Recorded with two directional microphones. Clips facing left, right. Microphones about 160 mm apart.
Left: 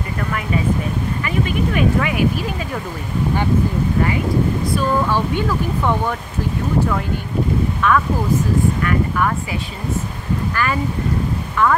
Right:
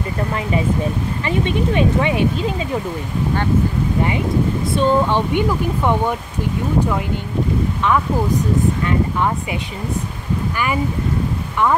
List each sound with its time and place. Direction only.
1.2 s speech: 30° right (ahead or behind)
4.7 s speech: 25° right (ahead or behind)
7.8 s speech: 20° right (ahead or behind)